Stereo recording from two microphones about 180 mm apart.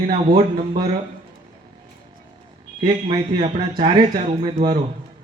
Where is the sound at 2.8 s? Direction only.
25° right (ahead or behind).